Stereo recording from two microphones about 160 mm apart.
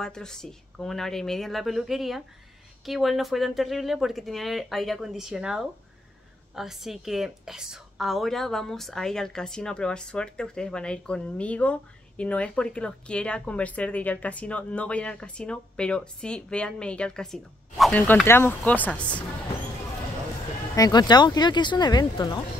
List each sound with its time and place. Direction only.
0.0 s a woman's voice: 5° left (ahead or behind)
20.7 s speech: 25° left (ahead or behind)